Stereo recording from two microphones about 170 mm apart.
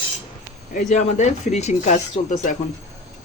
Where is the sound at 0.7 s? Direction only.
50° left (ahead or behind).